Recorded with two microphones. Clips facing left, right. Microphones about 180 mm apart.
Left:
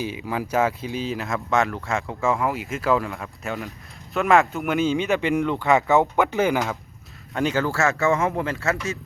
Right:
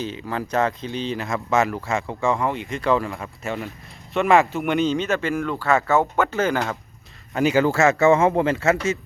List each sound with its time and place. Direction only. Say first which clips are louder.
0.0 s speech: even; 10° left (ahead or behind)
7.3 s speech: right 4 dB; 5° right (ahead or behind)
7.6 s speech: right 7 dB; 20° right (ahead or behind)